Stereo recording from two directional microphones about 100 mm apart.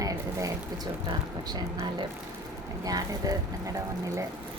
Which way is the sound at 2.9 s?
35° right (ahead or behind).